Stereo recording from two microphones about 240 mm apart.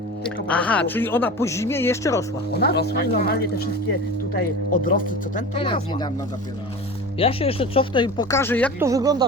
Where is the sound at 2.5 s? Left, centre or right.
Left.